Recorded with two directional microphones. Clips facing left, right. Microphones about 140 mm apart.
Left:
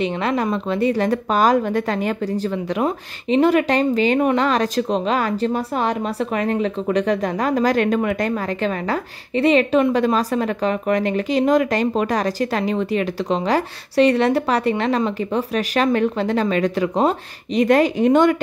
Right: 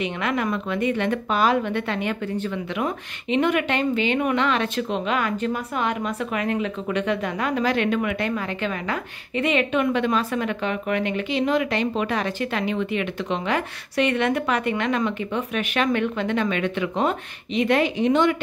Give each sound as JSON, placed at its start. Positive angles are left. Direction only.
{"t": 0.0, "sound": "a woman's voice", "side_deg": 30}